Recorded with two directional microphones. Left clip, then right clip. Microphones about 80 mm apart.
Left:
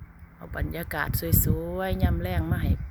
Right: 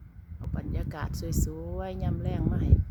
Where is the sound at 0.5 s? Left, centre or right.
Left.